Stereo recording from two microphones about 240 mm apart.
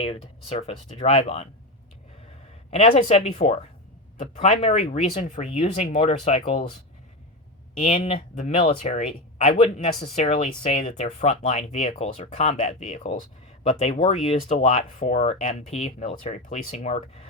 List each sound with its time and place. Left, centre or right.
0.0 s speech: left
2.6 s speech: left
7.9 s speech: left